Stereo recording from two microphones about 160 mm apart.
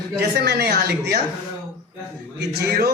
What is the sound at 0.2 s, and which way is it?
Speech, 90° right.